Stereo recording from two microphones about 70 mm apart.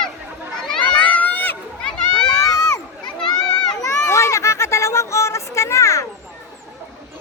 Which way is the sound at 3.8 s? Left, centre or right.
Left.